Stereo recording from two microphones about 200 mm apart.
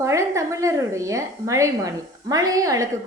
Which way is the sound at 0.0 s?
15° right (ahead or behind).